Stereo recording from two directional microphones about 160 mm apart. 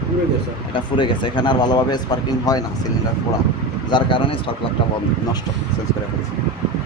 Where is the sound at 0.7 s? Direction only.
30° left (ahead or behind).